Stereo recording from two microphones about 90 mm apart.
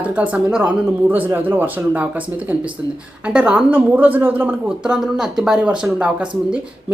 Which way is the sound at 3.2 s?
10° right (ahead or behind).